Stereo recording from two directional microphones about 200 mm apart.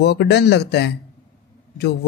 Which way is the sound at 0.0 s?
55° left (ahead or behind).